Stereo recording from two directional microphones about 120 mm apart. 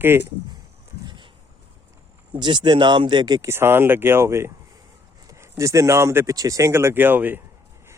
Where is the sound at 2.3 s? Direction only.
40° right (ahead or behind).